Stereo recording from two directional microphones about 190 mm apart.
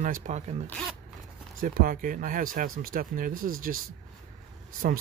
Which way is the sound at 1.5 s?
45° right (ahead or behind).